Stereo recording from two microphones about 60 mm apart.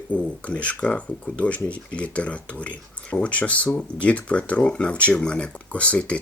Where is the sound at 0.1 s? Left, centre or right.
Left.